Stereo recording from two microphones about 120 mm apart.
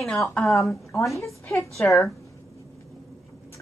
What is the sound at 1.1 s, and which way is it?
Speech, 25° left (ahead or behind).